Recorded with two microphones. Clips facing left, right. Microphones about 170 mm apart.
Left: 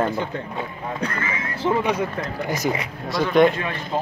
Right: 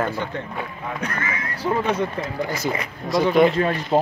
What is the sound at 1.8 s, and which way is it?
Speech, 10° left (ahead or behind).